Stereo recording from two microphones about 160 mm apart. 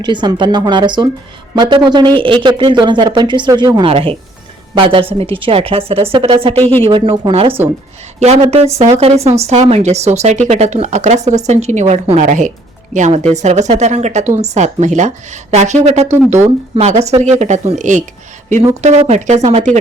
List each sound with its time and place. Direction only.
0.0 s speech: 30° right (ahead or behind); by 19.8 s 45° right (ahead or behind)